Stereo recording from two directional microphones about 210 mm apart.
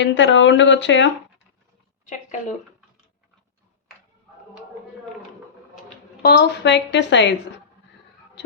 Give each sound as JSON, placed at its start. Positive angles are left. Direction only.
{"t": 0.0, "sound": "a woman's voice", "side_deg": 60}
{"t": 6.2, "sound": "a woman's voice", "side_deg": 50}